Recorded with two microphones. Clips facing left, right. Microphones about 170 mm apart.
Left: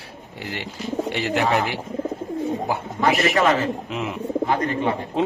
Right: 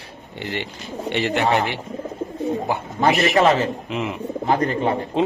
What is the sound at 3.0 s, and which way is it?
Speech, 30° right (ahead or behind).